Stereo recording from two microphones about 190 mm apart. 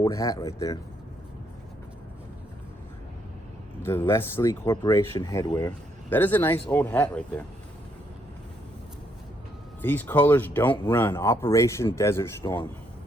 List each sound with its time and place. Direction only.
0.0 s speech: 15° left (ahead or behind)
3.8 s speech: 10° left (ahead or behind)
6.1 s speech: 10° left (ahead or behind)
9.8 s speech: 10° left (ahead or behind)